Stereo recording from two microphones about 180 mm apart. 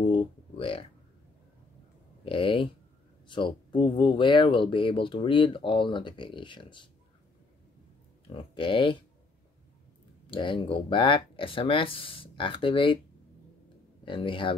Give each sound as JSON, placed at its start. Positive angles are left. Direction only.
{"t": 0.0, "sound": "a sound", "side_deg": 30}
{"t": 2.2, "sound": "speech", "side_deg": 30}
{"t": 8.3, "sound": "speech", "side_deg": 30}
{"t": 10.2, "sound": "speech", "side_deg": 25}
{"t": 14.0, "sound": "speech", "side_deg": 30}